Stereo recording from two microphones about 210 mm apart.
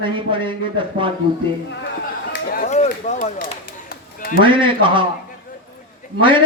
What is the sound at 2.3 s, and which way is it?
Run, 40° left (ahead or behind).